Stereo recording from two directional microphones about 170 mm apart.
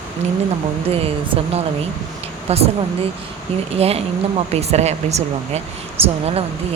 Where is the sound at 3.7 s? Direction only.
35° right (ahead or behind).